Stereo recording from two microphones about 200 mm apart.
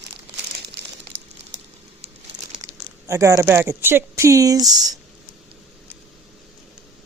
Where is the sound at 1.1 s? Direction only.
60° right (ahead or behind).